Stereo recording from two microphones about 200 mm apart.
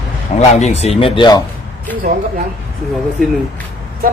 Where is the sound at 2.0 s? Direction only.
45° right (ahead or behind).